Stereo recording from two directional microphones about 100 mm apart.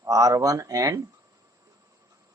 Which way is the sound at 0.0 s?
35° right (ahead or behind).